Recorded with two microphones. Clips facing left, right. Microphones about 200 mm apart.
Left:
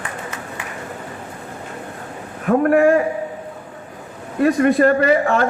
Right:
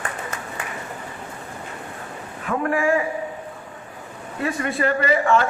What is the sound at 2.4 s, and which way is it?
Speech, 45° left (ahead or behind).